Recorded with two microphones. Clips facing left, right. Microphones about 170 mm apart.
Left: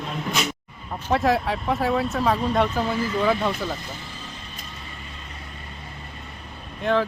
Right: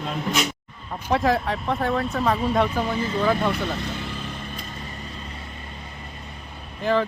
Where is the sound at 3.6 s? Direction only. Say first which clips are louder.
Right 3 dB; 70° right (ahead or behind).